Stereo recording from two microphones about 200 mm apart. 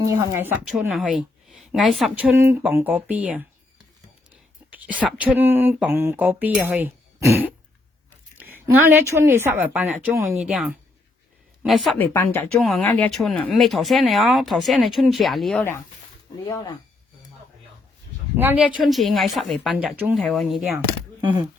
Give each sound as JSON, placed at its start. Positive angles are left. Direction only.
{"t": 0.1, "sound": "speech", "side_deg": -15}
{"t": 5.0, "sound": "a sound", "side_deg": -5}
{"t": 11.6, "sound": "speech", "side_deg": 0}
{"t": 11.9, "sound": "a woman's voice", "side_deg": 10}
{"t": 12.5, "sound": "speech", "side_deg": 0}
{"t": 18.3, "sound": "a sound", "side_deg": -10}
{"t": 18.9, "sound": "speech", "side_deg": 0}
{"t": 21.2, "sound": "speech", "side_deg": -20}